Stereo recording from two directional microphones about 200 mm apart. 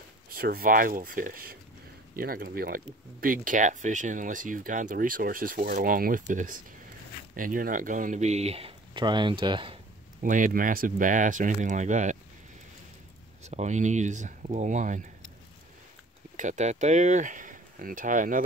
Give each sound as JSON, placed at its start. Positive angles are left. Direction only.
{"t": 0.3, "sound": "speech", "side_deg": -45}
{"t": 10.2, "sound": "speech", "side_deg": -40}
{"t": 13.4, "sound": "speech", "side_deg": -35}
{"t": 16.3, "sound": "speech", "side_deg": -35}